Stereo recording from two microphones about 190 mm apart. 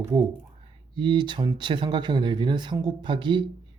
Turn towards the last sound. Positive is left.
turn(degrees=-25)  # may be behind; listen again after turning